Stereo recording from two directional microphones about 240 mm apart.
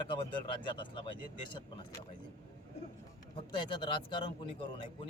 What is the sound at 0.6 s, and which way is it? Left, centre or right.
A man's voice, centre.